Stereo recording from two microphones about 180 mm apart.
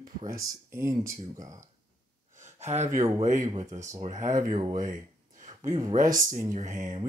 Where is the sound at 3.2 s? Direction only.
40° right (ahead or behind).